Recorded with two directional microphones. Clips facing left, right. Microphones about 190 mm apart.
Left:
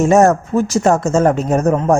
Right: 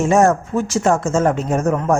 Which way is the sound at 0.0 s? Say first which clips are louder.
Left 3 dB; 40° left (ahead or behind).